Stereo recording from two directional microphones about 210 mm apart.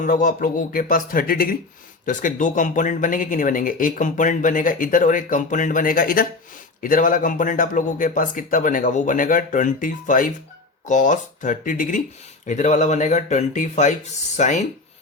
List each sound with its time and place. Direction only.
0.0 s speech: 40° left (ahead or behind)